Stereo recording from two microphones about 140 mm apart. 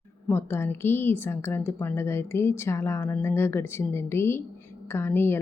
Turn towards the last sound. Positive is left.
turn(degrees=15)  # may be behind; listen again after turning